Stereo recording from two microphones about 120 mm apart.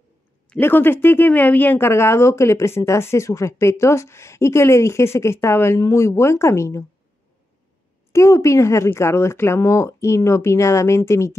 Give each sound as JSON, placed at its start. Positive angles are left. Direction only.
{"t": 0.6, "sound": "speech", "side_deg": 20}
{"t": 8.1, "sound": "speech", "side_deg": 25}